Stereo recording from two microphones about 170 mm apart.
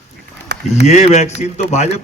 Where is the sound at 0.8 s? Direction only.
40° left (ahead or behind).